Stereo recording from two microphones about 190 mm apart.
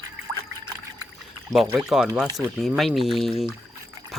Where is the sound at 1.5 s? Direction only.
Centre (ahead or behind).